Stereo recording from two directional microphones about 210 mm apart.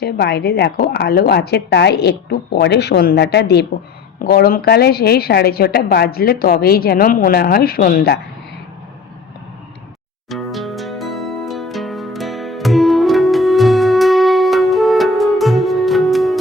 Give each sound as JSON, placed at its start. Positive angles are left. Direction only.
{"t": 0.0, "sound": "a woman's voice", "side_deg": 50}
{"t": 10.2, "sound": "music", "side_deg": 0}